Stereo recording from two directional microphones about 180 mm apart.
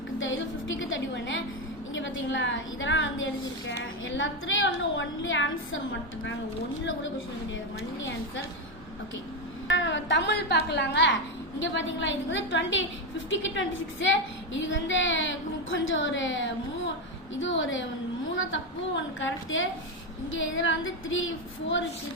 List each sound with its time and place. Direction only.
0.2 s music: 90° left
1.9 s a woman's voice: 90° left
9.6 s a woman's voice: 90° left